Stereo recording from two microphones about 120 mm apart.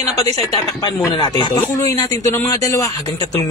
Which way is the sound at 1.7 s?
30° left (ahead or behind).